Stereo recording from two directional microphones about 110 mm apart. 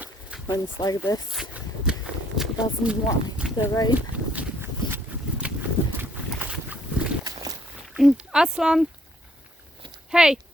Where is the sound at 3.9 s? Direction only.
15° right (ahead or behind).